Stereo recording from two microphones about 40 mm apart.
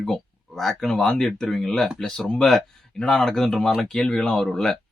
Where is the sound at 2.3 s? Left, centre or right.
Centre.